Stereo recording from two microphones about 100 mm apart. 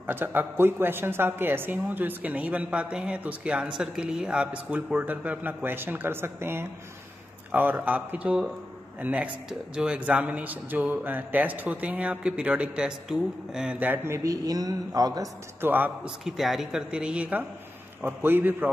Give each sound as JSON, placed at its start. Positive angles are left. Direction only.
{"t": 0.0, "sound": "a woman's voice", "side_deg": -20}
{"t": 7.8, "sound": "a woman's voice", "side_deg": -15}
{"t": 15.6, "sound": "a man's voice", "side_deg": -20}
{"t": 16.3, "sound": "a woman's voice", "side_deg": -5}